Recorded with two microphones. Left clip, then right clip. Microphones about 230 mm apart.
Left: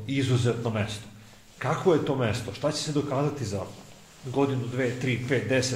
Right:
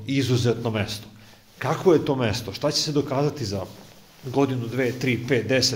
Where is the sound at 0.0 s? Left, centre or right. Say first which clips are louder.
Right 4 dB; right.